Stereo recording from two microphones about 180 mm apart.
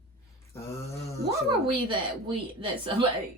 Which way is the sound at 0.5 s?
15° left (ahead or behind).